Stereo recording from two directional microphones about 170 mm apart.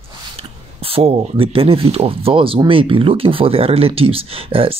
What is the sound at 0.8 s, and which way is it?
Speech, 35° right (ahead or behind).